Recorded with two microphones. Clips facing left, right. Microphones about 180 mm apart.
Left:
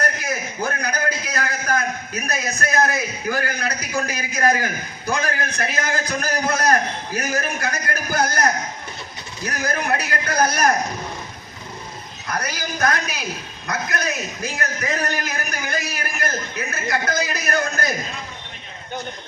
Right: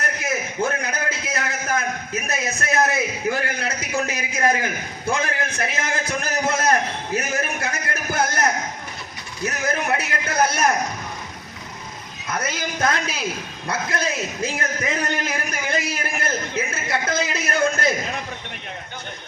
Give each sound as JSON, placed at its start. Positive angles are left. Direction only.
{"t": 0.0, "sound": "a sound", "side_deg": -25}
{"t": 2.1, "sound": "a man's voice", "side_deg": -25}
{"t": 12.3, "sound": "a man's voice", "side_deg": -25}
{"t": 15.2, "sound": "a man's voice", "side_deg": -25}